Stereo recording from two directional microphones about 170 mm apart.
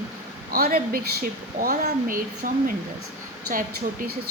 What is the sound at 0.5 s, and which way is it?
A woman's voice, 60° right (ahead or behind).